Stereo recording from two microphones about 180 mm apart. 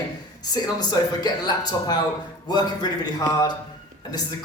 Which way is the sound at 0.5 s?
25° left (ahead or behind).